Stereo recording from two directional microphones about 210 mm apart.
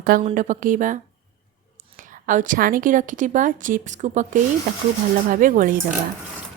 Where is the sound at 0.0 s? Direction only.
45° right (ahead or behind).